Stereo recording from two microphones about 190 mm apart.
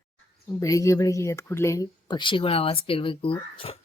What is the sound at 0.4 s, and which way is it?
Speech, 15° left (ahead or behind).